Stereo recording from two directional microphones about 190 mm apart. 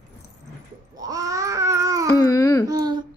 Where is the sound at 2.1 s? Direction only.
15° left (ahead or behind).